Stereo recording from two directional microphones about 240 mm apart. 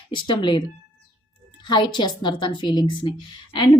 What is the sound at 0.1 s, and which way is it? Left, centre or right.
Speech, centre.